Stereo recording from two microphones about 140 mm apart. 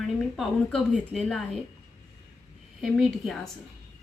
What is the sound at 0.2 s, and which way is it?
A woman's voice, centre (ahead or behind).